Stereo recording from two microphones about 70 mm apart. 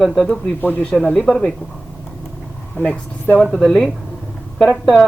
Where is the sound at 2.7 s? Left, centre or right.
Left.